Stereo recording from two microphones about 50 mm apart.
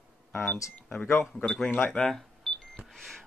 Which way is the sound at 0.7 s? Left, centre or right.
Left.